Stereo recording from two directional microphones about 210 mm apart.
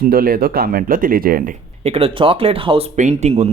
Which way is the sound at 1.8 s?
30° right (ahead or behind).